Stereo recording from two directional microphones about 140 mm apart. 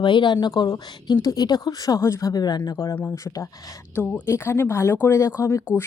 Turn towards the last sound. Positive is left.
turn(degrees=20)  # may be behind; listen again after turning